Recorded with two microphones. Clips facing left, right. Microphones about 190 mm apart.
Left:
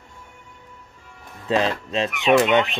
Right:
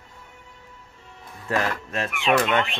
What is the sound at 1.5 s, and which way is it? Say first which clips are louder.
Speech: left 4 dB; 20° left (ahead or behind).